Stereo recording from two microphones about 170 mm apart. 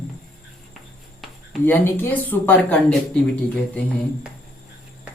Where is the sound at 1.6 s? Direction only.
10° left (ahead or behind).